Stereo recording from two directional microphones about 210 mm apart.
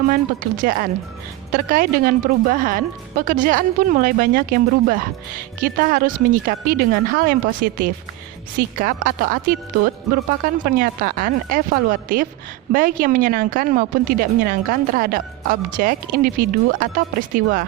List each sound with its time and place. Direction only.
0.1 s a woman's voice: 40° right (ahead or behind)